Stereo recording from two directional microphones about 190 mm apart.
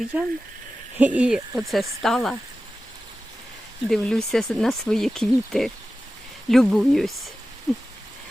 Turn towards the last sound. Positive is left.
turn(degrees=0)  # may be behind; listen again after turning